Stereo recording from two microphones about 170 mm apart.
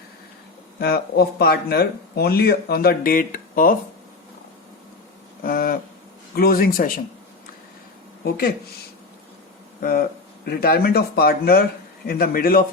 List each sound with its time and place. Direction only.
0.8 s speech: 65° left (ahead or behind)
5.4 s a sound: 60° left (ahead or behind)
6.3 s speech: 60° left (ahead or behind)
8.2 s speech: 60° left (ahead or behind)
10.4 s speech: 65° left (ahead or behind)